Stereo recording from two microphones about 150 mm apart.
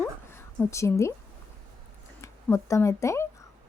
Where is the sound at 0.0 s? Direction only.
15° left (ahead or behind).